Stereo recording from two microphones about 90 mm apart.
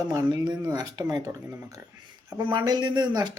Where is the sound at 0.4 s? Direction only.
50° right (ahead or behind).